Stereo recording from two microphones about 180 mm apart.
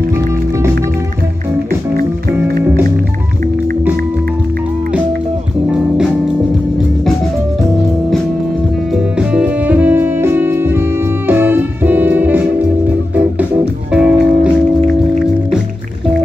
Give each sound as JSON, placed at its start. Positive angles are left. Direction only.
{"t": 8.9, "sound": "music", "side_deg": -5}
{"t": 13.9, "sound": "music", "side_deg": -5}